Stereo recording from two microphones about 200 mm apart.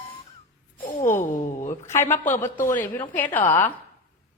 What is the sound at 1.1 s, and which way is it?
Speech, 40° left (ahead or behind).